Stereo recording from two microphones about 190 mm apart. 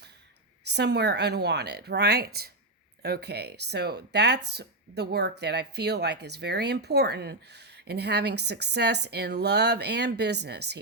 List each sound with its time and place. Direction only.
0.6 s speech: 60° right (ahead or behind)